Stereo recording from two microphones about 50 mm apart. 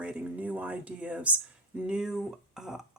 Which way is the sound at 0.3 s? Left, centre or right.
Right.